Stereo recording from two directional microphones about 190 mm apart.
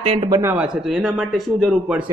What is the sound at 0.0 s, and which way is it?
Speech, 30° right (ahead or behind).